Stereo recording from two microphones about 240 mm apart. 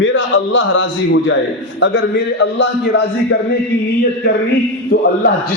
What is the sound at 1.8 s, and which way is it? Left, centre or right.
A man's voice, left.